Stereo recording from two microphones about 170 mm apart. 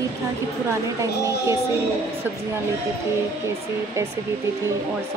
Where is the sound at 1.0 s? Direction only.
20° right (ahead or behind).